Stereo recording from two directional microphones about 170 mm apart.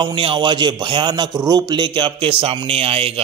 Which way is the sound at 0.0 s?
30° right (ahead or behind).